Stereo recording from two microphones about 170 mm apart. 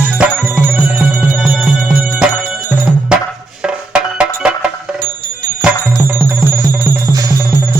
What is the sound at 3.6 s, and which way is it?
Music, 5° right (ahead or behind).